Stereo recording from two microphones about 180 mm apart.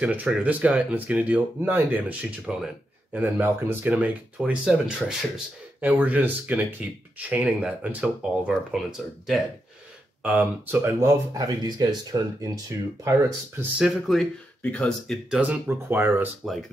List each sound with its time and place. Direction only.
0.0 s speech: 10° right (ahead or behind)
13.6 s speech: 5° right (ahead or behind)